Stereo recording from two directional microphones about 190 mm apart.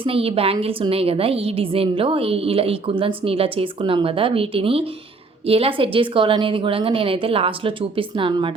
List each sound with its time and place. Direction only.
0.0 s a woman's voice: 30° right (ahead or behind)